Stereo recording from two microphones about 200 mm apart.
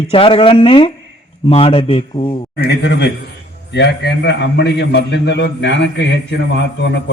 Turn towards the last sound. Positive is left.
turn(degrees=60)  # may be behind; listen again after turning